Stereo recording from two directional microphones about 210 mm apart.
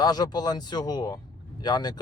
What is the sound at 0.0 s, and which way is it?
Speech, 20° left (ahead or behind).